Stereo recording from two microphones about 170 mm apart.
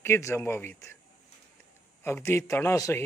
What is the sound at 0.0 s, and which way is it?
Speech, 15° left (ahead or behind).